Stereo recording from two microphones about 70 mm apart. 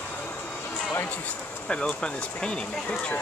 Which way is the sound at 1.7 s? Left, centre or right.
Centre.